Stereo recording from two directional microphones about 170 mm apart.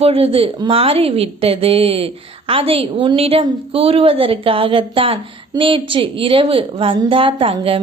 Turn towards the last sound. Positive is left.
turn(degrees=-30)  # may be behind; listen again after turning